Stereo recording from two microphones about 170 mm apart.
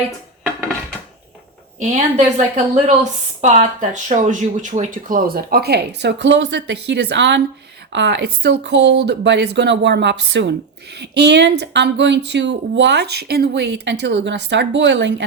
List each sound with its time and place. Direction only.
1.8 s a woman's voice: 45° right (ahead or behind); by 15.1 s 90° right